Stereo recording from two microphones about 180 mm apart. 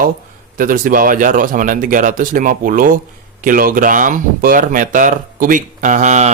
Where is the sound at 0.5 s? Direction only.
50° right (ahead or behind).